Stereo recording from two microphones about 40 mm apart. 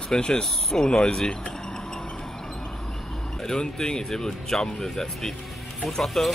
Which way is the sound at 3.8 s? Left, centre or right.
Centre.